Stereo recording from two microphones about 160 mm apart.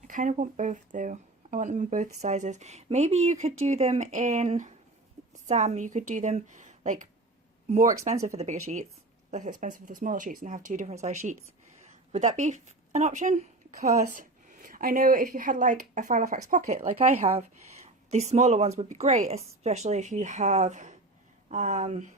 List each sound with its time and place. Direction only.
0.1 s a woman's voice: 55° right (ahead or behind)
8.1 s speech: 20° right (ahead or behind)
8.4 s a woman's voice: 45° right (ahead or behind)